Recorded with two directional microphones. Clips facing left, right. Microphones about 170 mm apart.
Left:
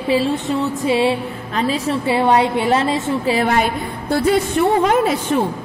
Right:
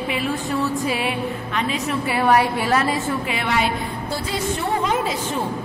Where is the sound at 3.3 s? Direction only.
45° left (ahead or behind); by 5.1 s 60° left (ahead or behind).